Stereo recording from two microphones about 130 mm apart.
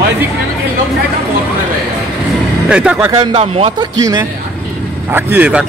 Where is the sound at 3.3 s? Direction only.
50° right (ahead or behind).